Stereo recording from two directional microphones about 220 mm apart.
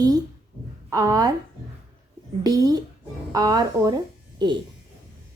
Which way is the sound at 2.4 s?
15° right (ahead or behind).